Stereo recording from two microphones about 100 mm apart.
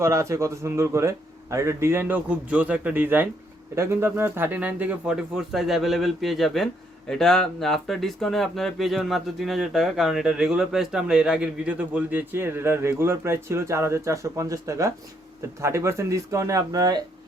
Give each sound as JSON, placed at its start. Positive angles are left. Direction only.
{"t": 0.0, "sound": "a man's voice", "side_deg": -30}